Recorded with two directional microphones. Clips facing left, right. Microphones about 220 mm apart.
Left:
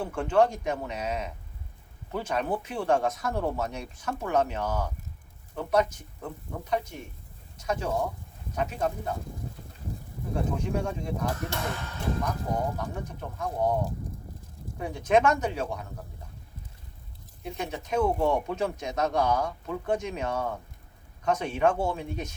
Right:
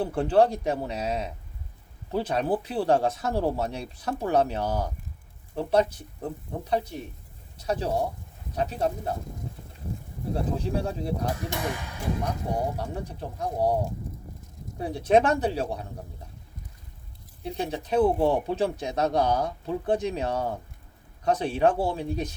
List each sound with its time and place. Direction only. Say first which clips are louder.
0.0 s speech: right 3 dB; 35° right (ahead or behind)
10.3 s speech: right 1 dB; 35° right (ahead or behind)
11.3 s speech: right 2 dB; 15° right (ahead or behind)
12.7 s speech: right 2 dB; 35° right (ahead or behind)
14.8 s speech: right 2 dB; 35° right (ahead or behind)
17.4 s speech: right 4 dB; 35° right (ahead or behind)